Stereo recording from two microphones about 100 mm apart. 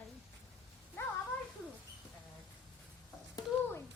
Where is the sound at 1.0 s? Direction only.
25° left (ahead or behind).